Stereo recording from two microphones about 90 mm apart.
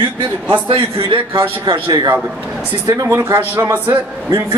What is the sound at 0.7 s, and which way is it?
Speech, 90° right.